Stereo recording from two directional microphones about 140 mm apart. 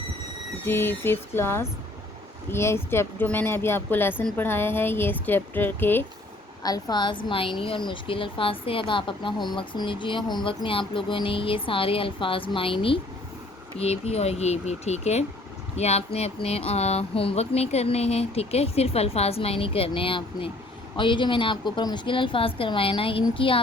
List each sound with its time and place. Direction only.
0.6 s speech: 15° left (ahead or behind)
6.6 s a woman's voice: 25° left (ahead or behind)